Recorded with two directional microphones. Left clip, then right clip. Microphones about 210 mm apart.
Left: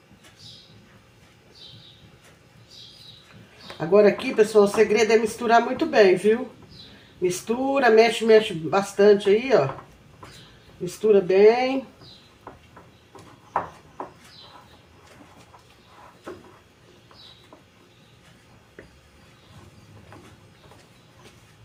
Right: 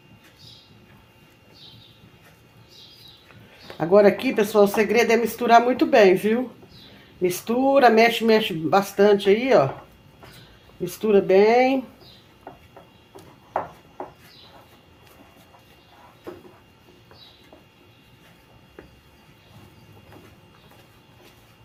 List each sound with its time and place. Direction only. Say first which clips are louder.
3.8 s speech: right 1 dB; 45° right (ahead or behind)
10.8 s speech: even; 45° right (ahead or behind)